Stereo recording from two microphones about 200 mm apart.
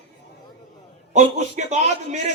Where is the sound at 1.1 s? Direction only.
35° right (ahead or behind).